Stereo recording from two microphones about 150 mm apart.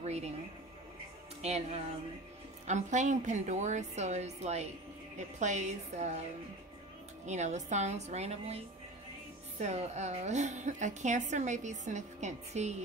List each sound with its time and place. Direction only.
0.0 s a sound: 45° right (ahead or behind)
1.4 s a woman's voice: 45° right (ahead or behind)
7.2 s a woman's voice: 50° right (ahead or behind)